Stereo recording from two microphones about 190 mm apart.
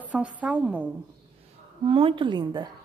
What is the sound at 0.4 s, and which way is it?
Speech, 5° right (ahead or behind).